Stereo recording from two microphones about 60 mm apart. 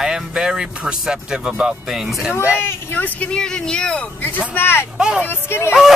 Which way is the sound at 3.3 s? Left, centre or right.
Centre.